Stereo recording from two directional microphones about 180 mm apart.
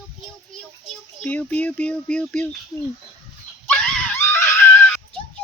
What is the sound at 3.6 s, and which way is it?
Screaming, 10° left (ahead or behind).